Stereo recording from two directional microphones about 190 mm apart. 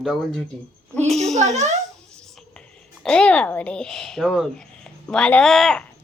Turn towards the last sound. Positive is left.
turn(degrees=0)  # may be behind; listen again after turning